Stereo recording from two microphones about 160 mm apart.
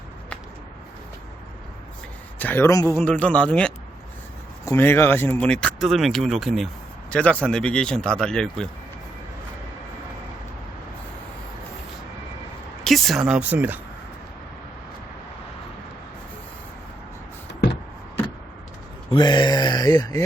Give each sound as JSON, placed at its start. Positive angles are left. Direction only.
{"t": 2.4, "sound": "speech", "side_deg": 10}
{"t": 3.0, "sound": "speech", "side_deg": 10}
{"t": 12.8, "sound": "speech", "side_deg": 0}
{"t": 17.5, "sound": "a sound", "side_deg": 90}
{"t": 19.1, "sound": "speech", "side_deg": 30}